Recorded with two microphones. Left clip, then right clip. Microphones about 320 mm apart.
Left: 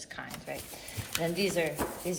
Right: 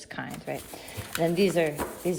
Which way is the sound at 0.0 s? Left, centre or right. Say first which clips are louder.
Right 4 dB; right.